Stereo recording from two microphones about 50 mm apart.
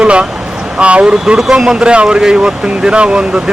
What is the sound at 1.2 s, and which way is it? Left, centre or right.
Speech, centre.